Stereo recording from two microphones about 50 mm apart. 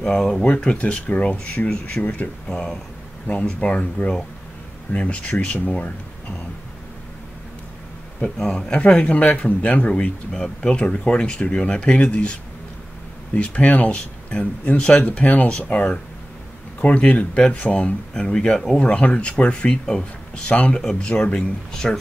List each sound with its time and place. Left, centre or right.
0.0 s speech: centre
0.4 s speech: left
2.4 s speech: centre
3.3 s speech: left
8.4 s speech: centre
10.3 s speech: centre
10.7 s speech: left
18.1 s speech: centre